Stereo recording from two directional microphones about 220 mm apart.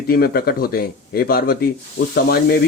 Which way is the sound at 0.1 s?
45° left (ahead or behind).